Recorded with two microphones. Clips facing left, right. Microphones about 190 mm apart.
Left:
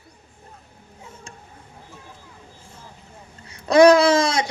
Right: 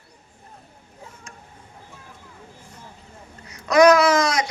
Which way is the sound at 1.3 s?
30° left (ahead or behind).